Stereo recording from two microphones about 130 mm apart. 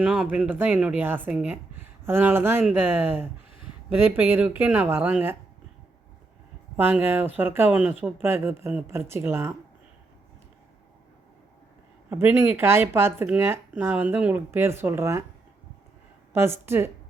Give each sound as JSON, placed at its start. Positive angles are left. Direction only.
{"t": 0.0, "sound": "speech", "side_deg": -5}
{"t": 6.7, "sound": "speech", "side_deg": -15}
{"t": 12.1, "sound": "speech", "side_deg": -15}
{"t": 16.3, "sound": "a woman's voice", "side_deg": -20}